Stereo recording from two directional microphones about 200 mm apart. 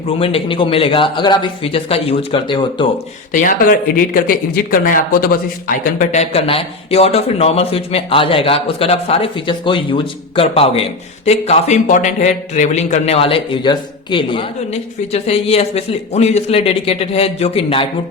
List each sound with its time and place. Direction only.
0.2 s speech: 25° left (ahead or behind)
3.3 s speech: 45° left (ahead or behind)